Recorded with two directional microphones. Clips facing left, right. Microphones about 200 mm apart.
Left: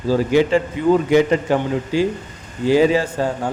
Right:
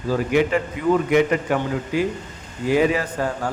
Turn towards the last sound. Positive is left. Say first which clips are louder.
# left 3 dB
turn(degrees=25)  # may be behind; listen again after turning